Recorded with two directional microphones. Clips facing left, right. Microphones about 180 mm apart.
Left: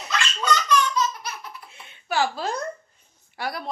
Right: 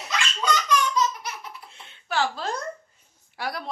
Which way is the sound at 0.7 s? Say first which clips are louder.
Left 1 dB; 15° right (ahead or behind).